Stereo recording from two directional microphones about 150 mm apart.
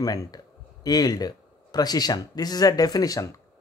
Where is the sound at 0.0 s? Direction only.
25° left (ahead or behind).